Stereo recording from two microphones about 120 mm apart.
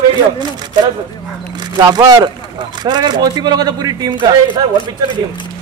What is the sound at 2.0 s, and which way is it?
Speech, 30° right (ahead or behind).